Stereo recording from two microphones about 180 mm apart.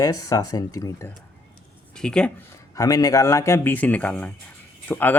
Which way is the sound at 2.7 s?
20° left (ahead or behind).